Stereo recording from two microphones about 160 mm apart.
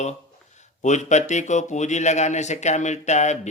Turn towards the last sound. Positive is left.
turn(degrees=45)  # may be behind; listen again after turning